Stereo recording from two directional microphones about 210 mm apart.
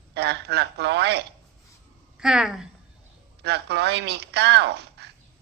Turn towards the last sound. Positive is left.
turn(degrees=-50)  # may be behind; listen again after turning